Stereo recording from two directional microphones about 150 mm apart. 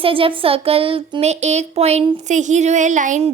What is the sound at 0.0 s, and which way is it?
A woman's voice, 35° right (ahead or behind).